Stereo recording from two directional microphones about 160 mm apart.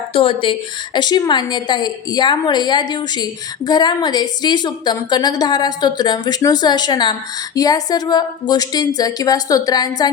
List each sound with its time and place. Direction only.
0.1 s a woman's voice: 35° left (ahead or behind)